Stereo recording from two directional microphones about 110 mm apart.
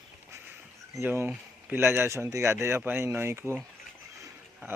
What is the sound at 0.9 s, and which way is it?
Speech, 20° right (ahead or behind).